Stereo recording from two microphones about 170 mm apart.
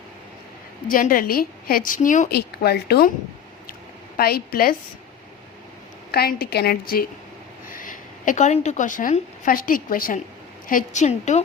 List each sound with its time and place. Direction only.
0.9 s a woman's voice: 55° left (ahead or behind)
2.3 s a woman's voice: 70° left (ahead or behind)
4.2 s a woman's voice: 65° left (ahead or behind)
6.1 s a woman's voice: 65° left (ahead or behind); by 11.4 s 45° left (ahead or behind)